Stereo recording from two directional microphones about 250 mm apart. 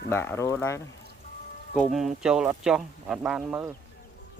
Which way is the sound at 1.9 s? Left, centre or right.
Centre.